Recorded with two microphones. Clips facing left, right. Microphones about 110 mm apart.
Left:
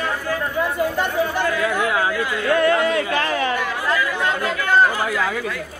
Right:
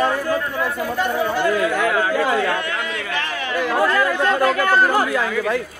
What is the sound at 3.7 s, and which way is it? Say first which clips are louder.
Chatter: right 4 dB; 50° right (ahead or behind).